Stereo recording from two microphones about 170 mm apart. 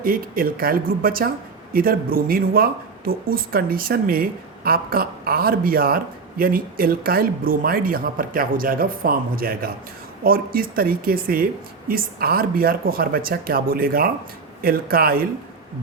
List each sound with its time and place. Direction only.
0.0 s speech: 55° right (ahead or behind)